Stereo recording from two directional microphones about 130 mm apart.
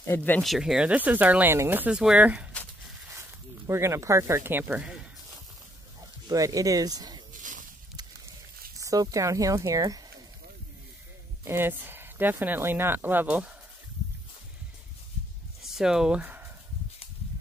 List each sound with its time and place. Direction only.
0.0 s speech: 15° left (ahead or behind)
0.4 s speech: centre (ahead or behind)
3.2 s speech: 20° right (ahead or behind)
6.2 s speech: 25° right (ahead or behind)
7.3 s a sound: 80° right
8.8 s speech: 25° right (ahead or behind)
11.4 s speech: 15° right (ahead or behind)
15.6 s speech: 5° right (ahead or behind)